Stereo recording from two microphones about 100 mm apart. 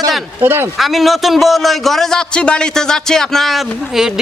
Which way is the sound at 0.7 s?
Centre (ahead or behind).